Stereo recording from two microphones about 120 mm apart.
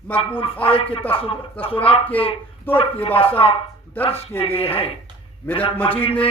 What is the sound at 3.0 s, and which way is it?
Speech, 50° left (ahead or behind).